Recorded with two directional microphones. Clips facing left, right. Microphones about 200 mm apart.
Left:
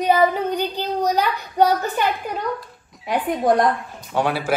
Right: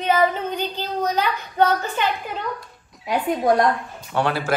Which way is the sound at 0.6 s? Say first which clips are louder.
Left 3 dB; 15° left (ahead or behind).